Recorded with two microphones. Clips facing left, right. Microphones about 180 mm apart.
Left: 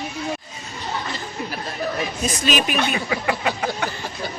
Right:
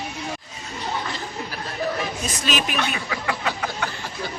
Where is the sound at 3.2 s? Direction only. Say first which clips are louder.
Left 3 dB; 25° left (ahead or behind).